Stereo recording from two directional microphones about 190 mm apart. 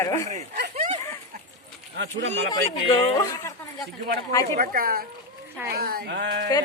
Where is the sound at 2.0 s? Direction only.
70° right (ahead or behind).